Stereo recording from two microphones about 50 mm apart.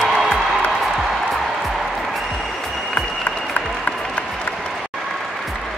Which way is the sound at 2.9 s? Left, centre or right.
Left.